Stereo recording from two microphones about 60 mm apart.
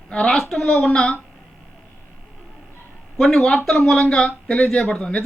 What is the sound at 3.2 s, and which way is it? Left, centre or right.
A man's voice, centre.